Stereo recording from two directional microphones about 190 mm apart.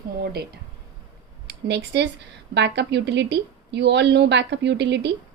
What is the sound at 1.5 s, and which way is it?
A woman's voice, 65° right (ahead or behind).